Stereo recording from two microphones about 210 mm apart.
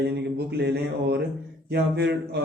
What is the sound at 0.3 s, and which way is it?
Speech, 50° right (ahead or behind).